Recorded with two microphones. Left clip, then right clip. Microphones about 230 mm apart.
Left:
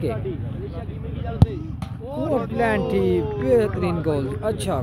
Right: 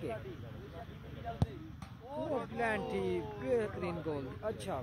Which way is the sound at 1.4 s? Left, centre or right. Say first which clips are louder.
Left 19 dB; centre.